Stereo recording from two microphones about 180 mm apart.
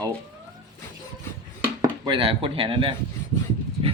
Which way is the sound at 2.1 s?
30° right (ahead or behind).